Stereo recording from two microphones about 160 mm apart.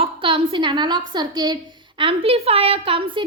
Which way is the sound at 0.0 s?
35° right (ahead or behind).